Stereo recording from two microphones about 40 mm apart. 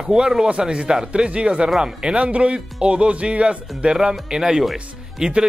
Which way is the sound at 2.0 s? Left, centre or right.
Right.